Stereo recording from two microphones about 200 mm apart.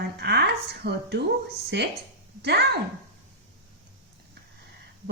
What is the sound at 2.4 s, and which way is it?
Speech, 55° right (ahead or behind).